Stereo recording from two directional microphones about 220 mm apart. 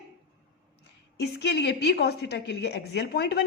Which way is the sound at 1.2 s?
50° left (ahead or behind).